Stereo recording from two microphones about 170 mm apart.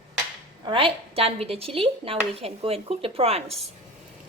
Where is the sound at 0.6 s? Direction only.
30° right (ahead or behind).